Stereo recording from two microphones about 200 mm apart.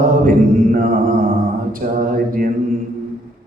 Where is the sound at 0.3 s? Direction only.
45° right (ahead or behind).